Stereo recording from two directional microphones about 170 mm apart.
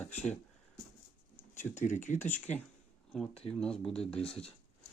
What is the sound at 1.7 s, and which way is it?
Speech, 45° left (ahead or behind).